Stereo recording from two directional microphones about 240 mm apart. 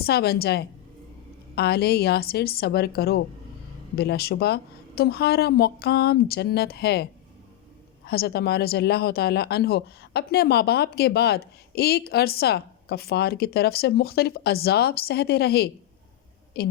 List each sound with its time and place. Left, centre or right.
0.0 s speech: left